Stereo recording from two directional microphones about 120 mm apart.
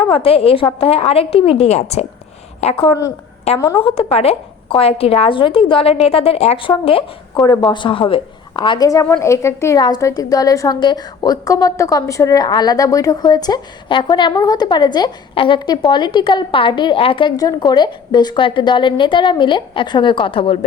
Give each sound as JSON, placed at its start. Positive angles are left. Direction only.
{"t": 0.1, "sound": "a woman's voice", "side_deg": 50}
{"t": 3.5, "sound": "a woman's voice", "side_deg": 60}
{"t": 17.3, "sound": "a woman's voice", "side_deg": 35}